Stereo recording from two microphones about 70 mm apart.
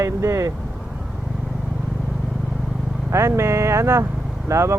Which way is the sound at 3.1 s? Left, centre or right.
Right.